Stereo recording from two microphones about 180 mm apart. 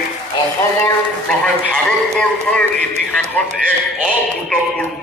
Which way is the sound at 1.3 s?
5° left (ahead or behind).